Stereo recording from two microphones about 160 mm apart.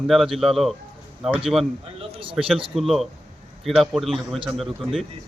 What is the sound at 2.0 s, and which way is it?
Speech, 40° right (ahead or behind).